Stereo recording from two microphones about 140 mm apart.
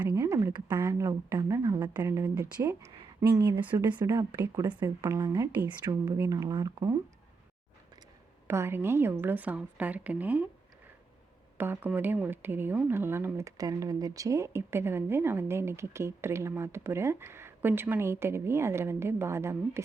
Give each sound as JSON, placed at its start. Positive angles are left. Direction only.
{"t": 0.2, "sound": "a sound", "side_deg": -20}
{"t": 0.8, "sound": "speech", "side_deg": -20}
{"t": 8.4, "sound": "speech", "side_deg": -20}
{"t": 11.5, "sound": "speech", "side_deg": -15}